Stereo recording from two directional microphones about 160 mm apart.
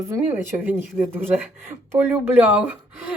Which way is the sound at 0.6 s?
10° right (ahead or behind).